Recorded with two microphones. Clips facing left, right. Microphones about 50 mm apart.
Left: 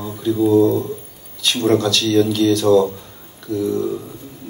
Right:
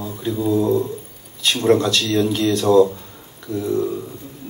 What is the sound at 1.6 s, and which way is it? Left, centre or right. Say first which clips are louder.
A man's voice: even; right.